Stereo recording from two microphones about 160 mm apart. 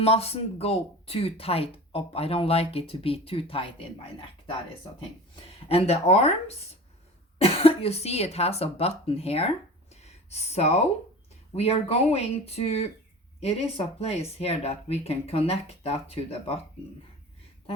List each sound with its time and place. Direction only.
0.0 s speech: 40° left (ahead or behind)
5.6 s speech: 40° left (ahead or behind)
7.3 s speech: 40° left (ahead or behind)
9.9 s a sound: 40° left (ahead or behind)
11.5 s speech: 40° left (ahead or behind)